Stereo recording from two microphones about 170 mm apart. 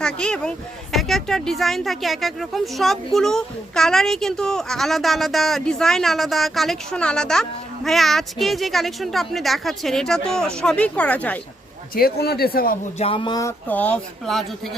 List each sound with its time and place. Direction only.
0.0 s speech: 5° left (ahead or behind)
11.9 s speech: 65° left (ahead or behind)
13.0 s speech: 30° left (ahead or behind)
13.7 s speech: 10° left (ahead or behind)